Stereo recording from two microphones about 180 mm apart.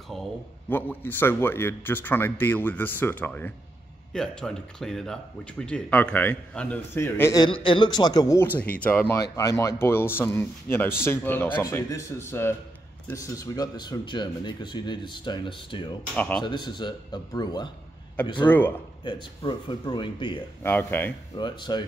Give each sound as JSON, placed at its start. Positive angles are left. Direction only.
{"t": 0.1, "sound": "a sound", "side_deg": 0}
{"t": 0.7, "sound": "speech", "side_deg": 10}
{"t": 7.4, "sound": "speech", "side_deg": 30}
{"t": 8.5, "sound": "speech", "side_deg": 10}
{"t": 16.2, "sound": "speech", "side_deg": 10}
{"t": 16.4, "sound": "speech", "side_deg": 25}
{"t": 20.6, "sound": "speech", "side_deg": 10}
{"t": 21.4, "sound": "speech", "side_deg": 25}